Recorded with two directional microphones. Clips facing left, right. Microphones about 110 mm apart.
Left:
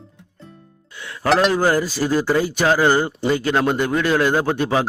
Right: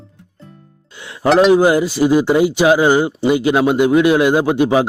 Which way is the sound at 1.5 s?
15° right (ahead or behind).